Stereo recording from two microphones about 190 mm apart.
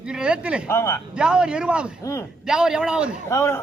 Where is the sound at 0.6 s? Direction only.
15° left (ahead or behind).